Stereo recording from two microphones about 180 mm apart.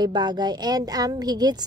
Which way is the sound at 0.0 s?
25° right (ahead or behind).